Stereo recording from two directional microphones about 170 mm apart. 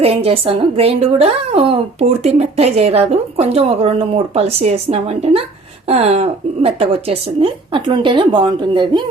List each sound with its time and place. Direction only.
0.0 s a woman's voice: 35° right (ahead or behind)